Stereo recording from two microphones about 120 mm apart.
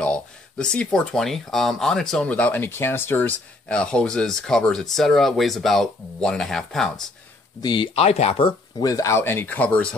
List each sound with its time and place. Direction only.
0.0 s a sound: 5° left (ahead or behind)
0.9 s speech: 5° left (ahead or behind)
7.6 s speech: 45° left (ahead or behind); by 8.5 s 60° left (ahead or behind)
8.5 s speech: 35° left (ahead or behind); by 9.9 s 10° left (ahead or behind)